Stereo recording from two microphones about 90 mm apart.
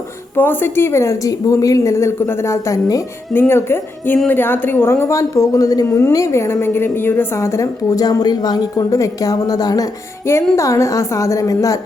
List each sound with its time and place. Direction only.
0.3 s a woman's voice: 25° left (ahead or behind)
3.3 s a woman's voice: 25° left (ahead or behind); by 9.8 s 45° left (ahead or behind)
10.2 s a woman's voice: 30° left (ahead or behind)